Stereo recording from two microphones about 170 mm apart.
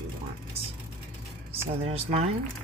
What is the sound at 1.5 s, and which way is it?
Speech, 35° right (ahead or behind).